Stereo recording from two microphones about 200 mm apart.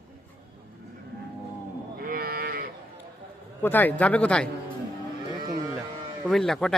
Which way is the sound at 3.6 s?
10° left (ahead or behind).